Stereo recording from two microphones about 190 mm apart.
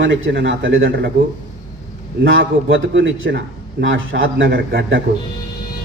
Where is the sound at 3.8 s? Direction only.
85° right; by 5.0 s 70° right (ahead or behind).